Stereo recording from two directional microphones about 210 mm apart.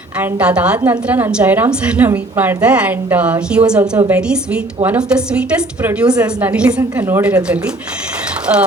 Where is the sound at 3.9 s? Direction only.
15° right (ahead or behind).